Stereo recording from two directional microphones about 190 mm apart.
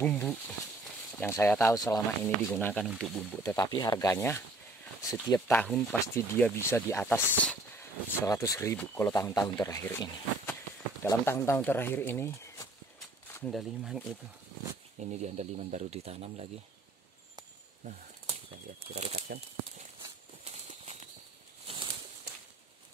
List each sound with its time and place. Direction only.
0.0 s speech: 5° left (ahead or behind)
2.5 s speech: 5° left (ahead or behind)
3.4 s speech: 15° left (ahead or behind)
13.5 s speech: centre (ahead or behind)
15.0 s speech: 35° right (ahead or behind)
18.9 s speech: 35° right (ahead or behind)
20.0 s walk: 35° right (ahead or behind)